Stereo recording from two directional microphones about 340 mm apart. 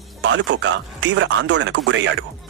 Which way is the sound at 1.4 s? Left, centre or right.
Right.